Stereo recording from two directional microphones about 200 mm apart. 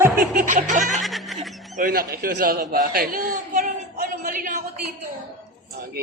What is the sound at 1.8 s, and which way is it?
A child's voice, 50° right (ahead or behind).